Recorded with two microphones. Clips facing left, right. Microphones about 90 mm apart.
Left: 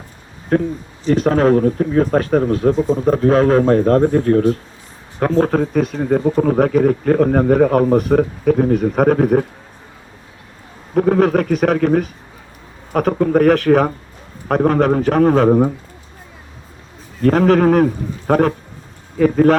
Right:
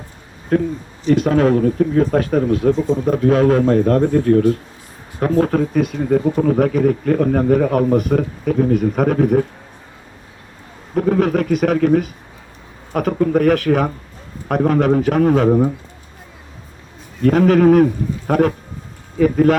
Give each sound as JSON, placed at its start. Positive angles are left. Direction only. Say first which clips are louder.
{"t": 0.5, "sound": "speech", "louder": "even", "side_deg": 45}
{"t": 10.9, "sound": "speech", "louder": "left 2 dB", "side_deg": 50}
{"t": 17.2, "sound": "speech", "louder": "even", "side_deg": 40}